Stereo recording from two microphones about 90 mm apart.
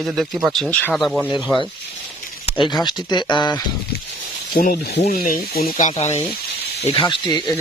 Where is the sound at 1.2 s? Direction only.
15° right (ahead or behind).